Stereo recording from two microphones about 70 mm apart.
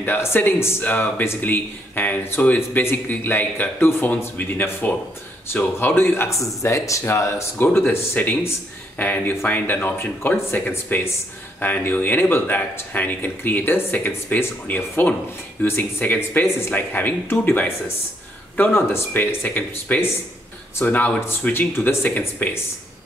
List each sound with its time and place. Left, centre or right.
0.0 s speech: left
6.3 s speech: left
19.1 s speech: left